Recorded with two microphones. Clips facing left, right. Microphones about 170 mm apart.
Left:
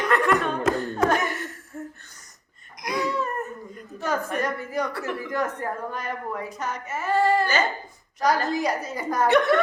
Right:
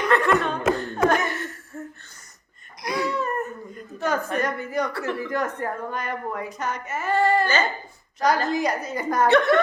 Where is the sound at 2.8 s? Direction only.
5° right (ahead or behind).